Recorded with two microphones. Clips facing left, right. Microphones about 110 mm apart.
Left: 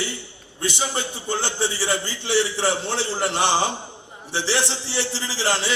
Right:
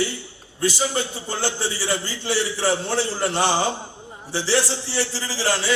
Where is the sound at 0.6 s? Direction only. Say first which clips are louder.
Right 3 dB; 25° left (ahead or behind).